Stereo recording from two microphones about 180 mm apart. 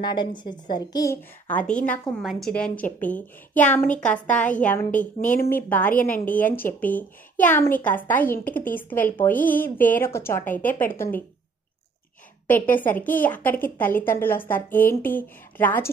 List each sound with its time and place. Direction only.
0.0 s a woman's voice: 25° left (ahead or behind)
1.5 s speech: 5° left (ahead or behind)
4.9 s speech: 45° left (ahead or behind)
5.5 s speech: 10° left (ahead or behind)
12.7 s speech: 10° left (ahead or behind)